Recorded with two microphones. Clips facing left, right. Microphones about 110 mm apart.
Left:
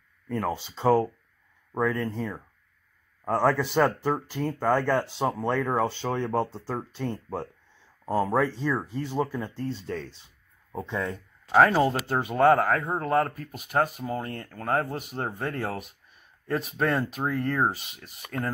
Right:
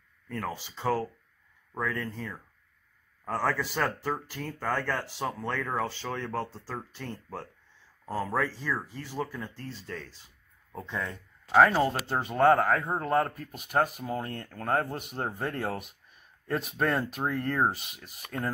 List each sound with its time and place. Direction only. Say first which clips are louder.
0.6 s speech: left 8 dB; 25° left (ahead or behind)
1.8 s speech: left 6 dB; 15° left (ahead or behind)
11.5 s speech: left 2 dB; 5° left (ahead or behind)